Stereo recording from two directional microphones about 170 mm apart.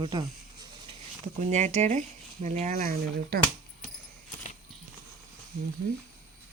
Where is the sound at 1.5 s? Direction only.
40° right (ahead or behind); by 3.4 s 60° right (ahead or behind).